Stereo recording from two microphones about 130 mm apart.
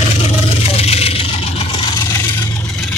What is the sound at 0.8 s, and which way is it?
Vehicle, 50° left (ahead or behind).